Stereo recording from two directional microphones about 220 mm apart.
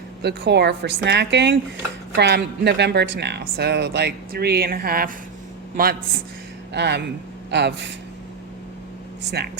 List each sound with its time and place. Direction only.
0.2 s speech: 50° right (ahead or behind)
9.4 s speech: 50° right (ahead or behind)